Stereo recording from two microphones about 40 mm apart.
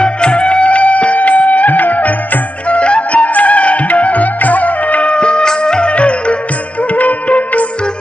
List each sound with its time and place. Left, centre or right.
0.0 s music: left
5.1 s music: left